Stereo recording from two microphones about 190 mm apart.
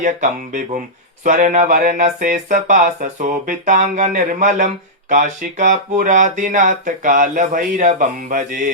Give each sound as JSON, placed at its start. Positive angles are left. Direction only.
{"t": 0.0, "sound": "speech", "side_deg": -45}